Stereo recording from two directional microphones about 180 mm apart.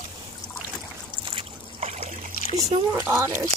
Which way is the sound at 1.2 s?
30° right (ahead or behind).